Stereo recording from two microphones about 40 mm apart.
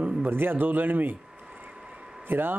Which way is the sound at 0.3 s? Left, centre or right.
Right.